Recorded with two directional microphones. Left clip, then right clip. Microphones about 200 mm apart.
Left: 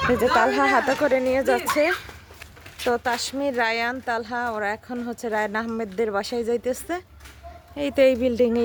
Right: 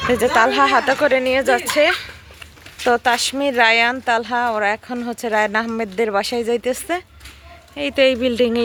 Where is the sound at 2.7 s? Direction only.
15° right (ahead or behind).